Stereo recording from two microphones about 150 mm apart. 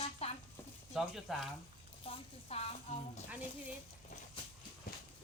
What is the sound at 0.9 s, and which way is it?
Speech, centre (ahead or behind).